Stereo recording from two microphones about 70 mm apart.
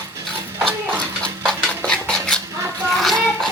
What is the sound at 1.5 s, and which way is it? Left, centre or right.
Cutlery, centre.